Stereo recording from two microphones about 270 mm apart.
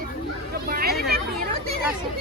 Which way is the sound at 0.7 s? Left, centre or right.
Right.